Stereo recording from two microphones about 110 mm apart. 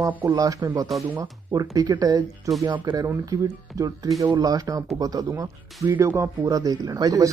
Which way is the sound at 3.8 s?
30° right (ahead or behind).